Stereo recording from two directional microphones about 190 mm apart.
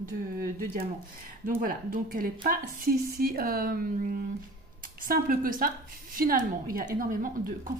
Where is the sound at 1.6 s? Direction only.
50° right (ahead or behind).